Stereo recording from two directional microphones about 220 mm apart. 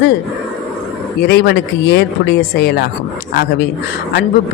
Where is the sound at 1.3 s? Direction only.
50° left (ahead or behind).